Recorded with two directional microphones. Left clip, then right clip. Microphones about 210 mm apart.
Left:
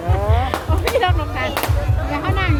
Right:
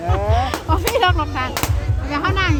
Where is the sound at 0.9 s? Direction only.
40° right (ahead or behind).